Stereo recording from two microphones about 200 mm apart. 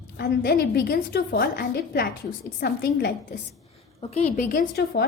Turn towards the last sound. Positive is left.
turn(degrees=50)  # may be behind; listen again after turning